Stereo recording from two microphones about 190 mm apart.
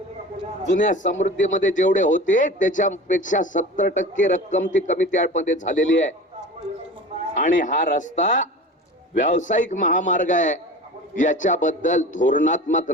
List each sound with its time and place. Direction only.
0.7 s speech: 40° left (ahead or behind)
7.3 s speech: 40° left (ahead or behind)